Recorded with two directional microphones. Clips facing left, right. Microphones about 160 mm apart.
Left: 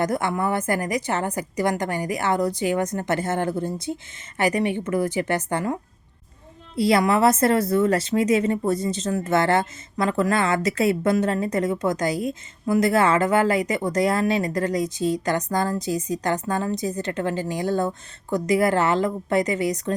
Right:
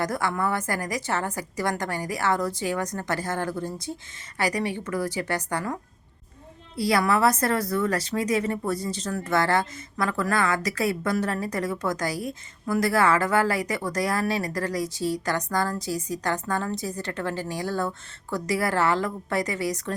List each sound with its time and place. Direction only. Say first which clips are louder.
0.0 s speech: left 3 dB; 20° left (ahead or behind)